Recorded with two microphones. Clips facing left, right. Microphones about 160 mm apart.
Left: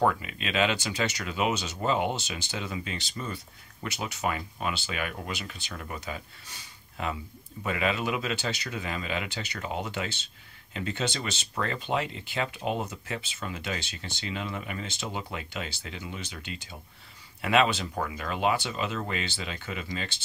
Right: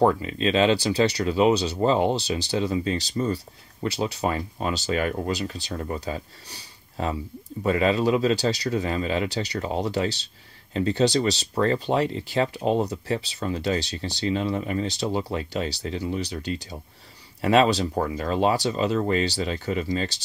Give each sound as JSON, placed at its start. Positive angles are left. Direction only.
{"t": 0.0, "sound": "speech", "side_deg": -30}